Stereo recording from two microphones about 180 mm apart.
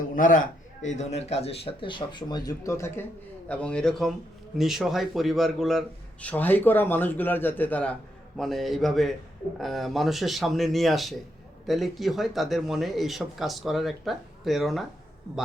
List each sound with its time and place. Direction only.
0.2 s a man's voice: 45° left (ahead or behind); by 14.8 s centre (ahead or behind)